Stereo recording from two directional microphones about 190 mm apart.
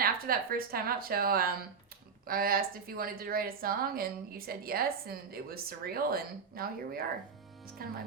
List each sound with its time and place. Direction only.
0.0 s a woman's voice: 50° right (ahead or behind)